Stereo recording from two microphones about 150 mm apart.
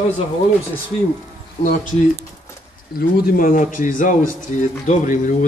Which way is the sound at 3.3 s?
65° left (ahead or behind).